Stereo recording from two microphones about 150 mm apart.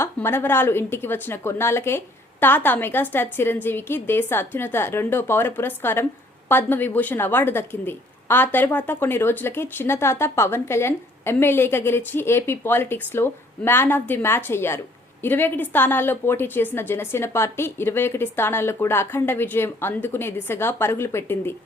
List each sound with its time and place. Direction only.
0.0 s a woman's voice: 15° left (ahead or behind)